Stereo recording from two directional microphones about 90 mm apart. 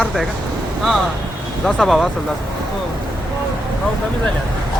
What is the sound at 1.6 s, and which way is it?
Speech, 5° left (ahead or behind).